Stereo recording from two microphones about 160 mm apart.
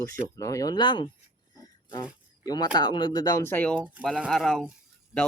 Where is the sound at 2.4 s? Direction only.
25° left (ahead or behind).